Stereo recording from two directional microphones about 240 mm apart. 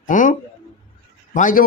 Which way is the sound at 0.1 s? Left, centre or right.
Left.